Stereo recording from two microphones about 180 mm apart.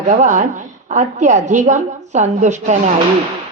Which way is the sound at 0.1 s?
45° right (ahead or behind).